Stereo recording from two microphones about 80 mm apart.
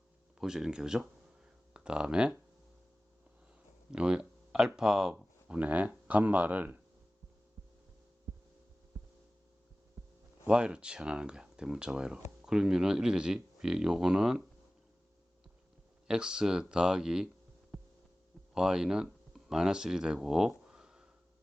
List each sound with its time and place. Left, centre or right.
0.3 s speech: centre
3.9 s speech: centre
10.4 s speech: centre
16.0 s speech: centre
17.7 s heart sounds: centre
18.5 s speech: centre